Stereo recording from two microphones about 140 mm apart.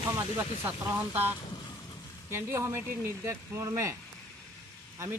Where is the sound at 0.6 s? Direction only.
10° right (ahead or behind).